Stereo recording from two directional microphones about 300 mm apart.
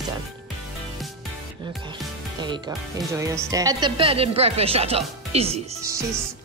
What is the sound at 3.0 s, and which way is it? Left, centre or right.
A woman's voice, centre.